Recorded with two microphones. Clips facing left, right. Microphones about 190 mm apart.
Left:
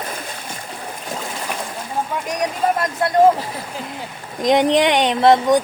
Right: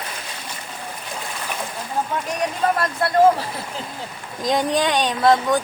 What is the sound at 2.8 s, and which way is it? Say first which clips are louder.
Speech: left 2 dB; 20° left (ahead or behind).